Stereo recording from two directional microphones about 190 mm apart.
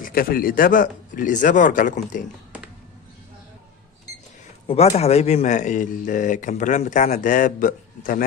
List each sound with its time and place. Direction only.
0.0 s speech: 50° left (ahead or behind)
4.8 s speech: 35° left (ahead or behind)